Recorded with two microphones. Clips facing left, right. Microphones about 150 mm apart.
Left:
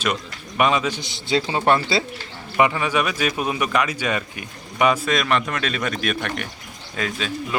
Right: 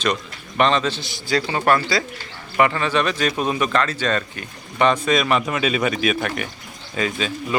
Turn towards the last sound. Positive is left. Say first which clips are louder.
# right 2 dB
turn(degrees=0)  # may be behind; listen again after turning